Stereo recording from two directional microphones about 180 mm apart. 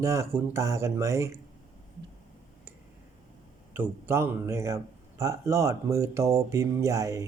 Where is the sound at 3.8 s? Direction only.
15° right (ahead or behind).